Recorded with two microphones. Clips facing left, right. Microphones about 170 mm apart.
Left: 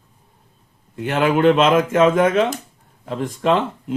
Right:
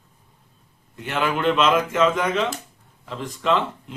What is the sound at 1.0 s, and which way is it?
Speech, 50° left (ahead or behind).